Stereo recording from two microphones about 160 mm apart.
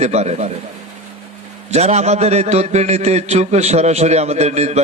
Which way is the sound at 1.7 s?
45° right (ahead or behind).